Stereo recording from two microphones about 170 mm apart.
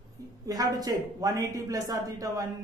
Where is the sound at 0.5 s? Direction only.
20° right (ahead or behind).